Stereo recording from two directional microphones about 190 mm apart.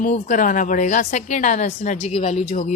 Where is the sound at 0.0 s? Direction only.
40° left (ahead or behind).